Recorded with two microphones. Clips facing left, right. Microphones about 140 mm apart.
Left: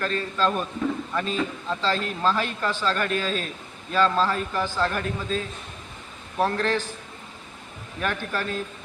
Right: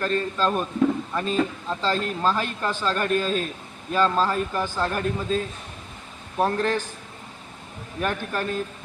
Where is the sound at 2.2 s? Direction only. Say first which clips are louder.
Even; 10° right (ahead or behind).